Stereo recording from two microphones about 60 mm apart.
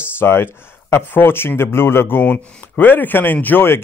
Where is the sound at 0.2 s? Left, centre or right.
Left.